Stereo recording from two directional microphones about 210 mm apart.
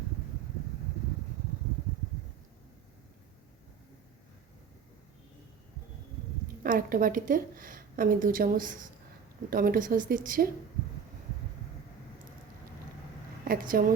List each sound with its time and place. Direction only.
6.6 s a woman's voice: 40° right (ahead or behind)
13.5 s speech: 45° right (ahead or behind)